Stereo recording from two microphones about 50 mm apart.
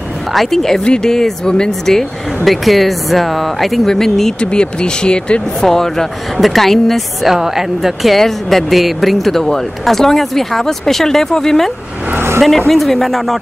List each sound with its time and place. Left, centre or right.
0.3 s speech: centre
7.3 s speech: centre